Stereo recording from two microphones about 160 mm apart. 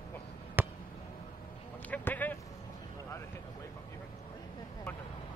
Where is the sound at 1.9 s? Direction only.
10° left (ahead or behind).